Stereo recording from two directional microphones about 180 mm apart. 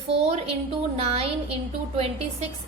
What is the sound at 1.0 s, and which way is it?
A woman's voice, 35° right (ahead or behind).